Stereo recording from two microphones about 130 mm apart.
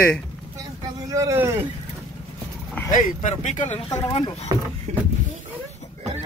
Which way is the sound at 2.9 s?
75° left (ahead or behind).